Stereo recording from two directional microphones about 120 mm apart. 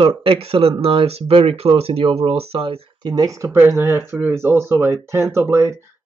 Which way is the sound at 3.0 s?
35° right (ahead or behind).